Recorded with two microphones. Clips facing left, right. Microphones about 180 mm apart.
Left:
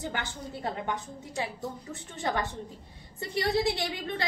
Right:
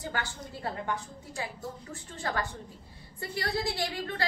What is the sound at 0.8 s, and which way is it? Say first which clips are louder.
Speech: left 1 dB; 20° left (ahead or behind).